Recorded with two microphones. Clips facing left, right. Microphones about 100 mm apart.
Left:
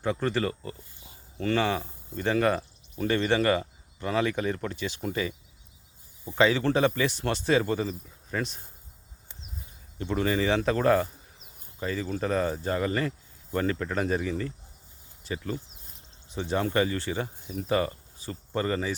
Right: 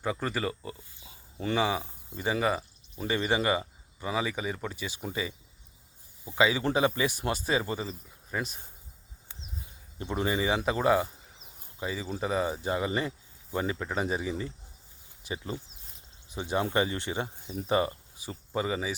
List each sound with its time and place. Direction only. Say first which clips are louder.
0.0 s speech: left 4 dB; 10° right (ahead or behind)
10.0 s speech: left 3 dB; 20° right (ahead or behind)